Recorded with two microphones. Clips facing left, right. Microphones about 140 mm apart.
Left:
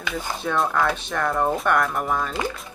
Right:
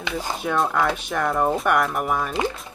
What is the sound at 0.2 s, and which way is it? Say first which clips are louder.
Speech: right 1 dB; 10° right (ahead or behind).